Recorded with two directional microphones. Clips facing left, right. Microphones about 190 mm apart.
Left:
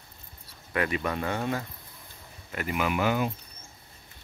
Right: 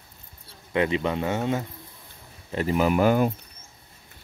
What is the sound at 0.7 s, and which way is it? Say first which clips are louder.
Speech: right 5 dB; 20° right (ahead or behind).